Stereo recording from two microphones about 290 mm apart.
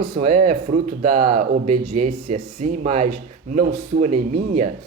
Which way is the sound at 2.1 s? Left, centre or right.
Right.